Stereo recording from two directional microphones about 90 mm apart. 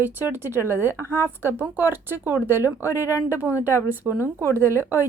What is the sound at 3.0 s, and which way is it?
Speech, 30° left (ahead or behind).